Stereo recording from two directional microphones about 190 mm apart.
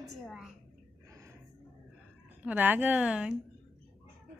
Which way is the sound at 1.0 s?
15° right (ahead or behind).